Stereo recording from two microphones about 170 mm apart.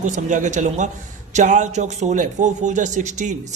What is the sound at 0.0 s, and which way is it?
Speech, 45° right (ahead or behind).